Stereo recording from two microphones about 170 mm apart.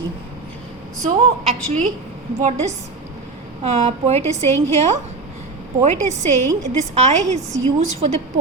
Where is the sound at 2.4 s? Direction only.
40° right (ahead or behind).